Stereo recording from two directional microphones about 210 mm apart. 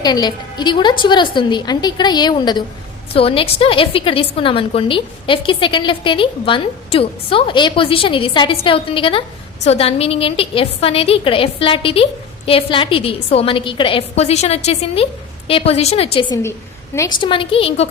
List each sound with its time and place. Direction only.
0.0 s a woman's voice: 20° left (ahead or behind)
16.1 s a woman's voice: 15° left (ahead or behind)